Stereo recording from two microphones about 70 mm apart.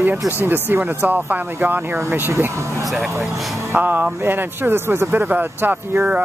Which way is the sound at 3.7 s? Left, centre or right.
Right.